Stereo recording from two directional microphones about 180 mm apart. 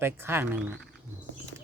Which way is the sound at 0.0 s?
15° right (ahead or behind).